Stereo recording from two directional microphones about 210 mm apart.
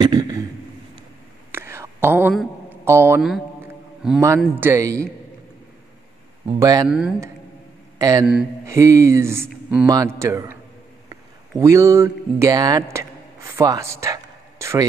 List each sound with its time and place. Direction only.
0.0 s a man's voice: 20° right (ahead or behind)
1.5 s whispering: 10° right (ahead or behind)
2.8 s a sound: 10° right (ahead or behind)
4.6 s speech: 15° right (ahead or behind)
6.6 s speech: 15° right (ahead or behind)
6.9 s speech: 5° right (ahead or behind)
8.0 s speech: 15° right (ahead or behind)
11.6 s speech: 15° right (ahead or behind)